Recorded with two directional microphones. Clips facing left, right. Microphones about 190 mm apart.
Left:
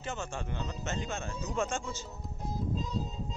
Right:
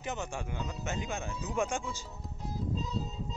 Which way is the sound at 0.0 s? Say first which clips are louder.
Right 1 dB; 15° right (ahead or behind).